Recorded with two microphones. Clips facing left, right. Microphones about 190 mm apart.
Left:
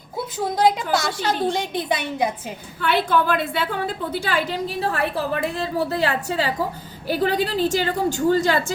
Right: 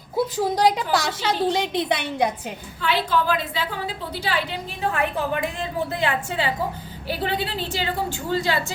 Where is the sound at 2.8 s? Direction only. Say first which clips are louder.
Left 2 dB; 55° left (ahead or behind).